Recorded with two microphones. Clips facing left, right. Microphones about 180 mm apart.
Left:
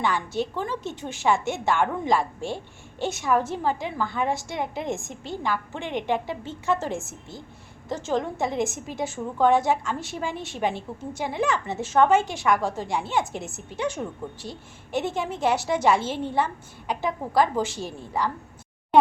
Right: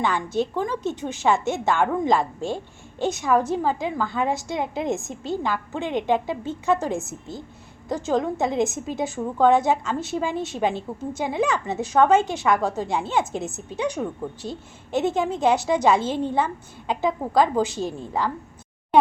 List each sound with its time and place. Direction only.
0.0 s a woman's voice: 20° right (ahead or behind)